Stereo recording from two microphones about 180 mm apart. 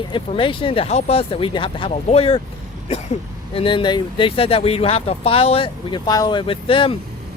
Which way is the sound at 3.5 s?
30° left (ahead or behind).